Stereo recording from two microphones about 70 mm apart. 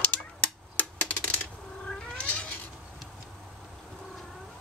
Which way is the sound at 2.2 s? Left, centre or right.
Centre.